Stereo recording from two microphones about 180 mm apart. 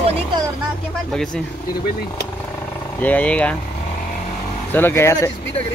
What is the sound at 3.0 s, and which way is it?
Speech, 10° left (ahead or behind).